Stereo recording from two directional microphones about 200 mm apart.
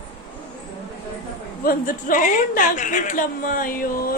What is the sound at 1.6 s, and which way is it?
A woman's voice, 45° left (ahead or behind).